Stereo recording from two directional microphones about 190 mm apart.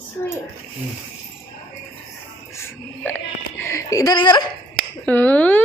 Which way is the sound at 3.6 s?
15° left (ahead or behind).